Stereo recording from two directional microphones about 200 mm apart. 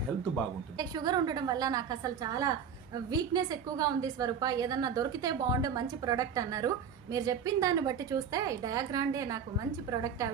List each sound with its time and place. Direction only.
0.8 s a woman's voice: 20° right (ahead or behind)